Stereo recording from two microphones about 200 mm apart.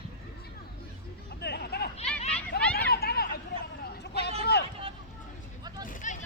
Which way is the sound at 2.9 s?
50° left (ahead or behind).